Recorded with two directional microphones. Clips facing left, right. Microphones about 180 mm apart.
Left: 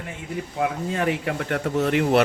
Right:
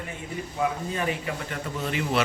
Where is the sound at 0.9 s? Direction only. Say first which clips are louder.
Left 5 dB; 70° left (ahead or behind).